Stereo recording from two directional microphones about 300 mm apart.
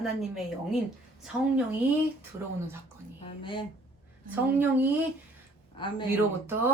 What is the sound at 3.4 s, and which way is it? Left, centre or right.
Speech, centre.